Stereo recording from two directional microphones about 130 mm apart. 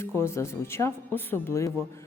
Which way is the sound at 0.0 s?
20° left (ahead or behind).